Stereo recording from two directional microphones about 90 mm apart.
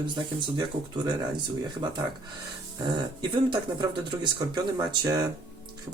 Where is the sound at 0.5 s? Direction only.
55° right (ahead or behind).